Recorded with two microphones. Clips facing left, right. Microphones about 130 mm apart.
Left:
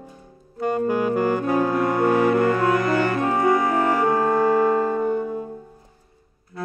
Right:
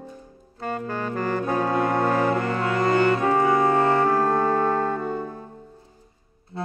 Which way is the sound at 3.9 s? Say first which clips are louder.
Left 1 dB; 10° left (ahead or behind).